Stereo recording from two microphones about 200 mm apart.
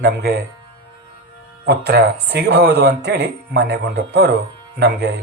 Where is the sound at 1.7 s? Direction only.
55° right (ahead or behind).